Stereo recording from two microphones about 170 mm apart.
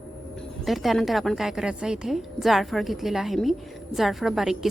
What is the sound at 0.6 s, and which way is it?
A woman's voice, centre (ahead or behind).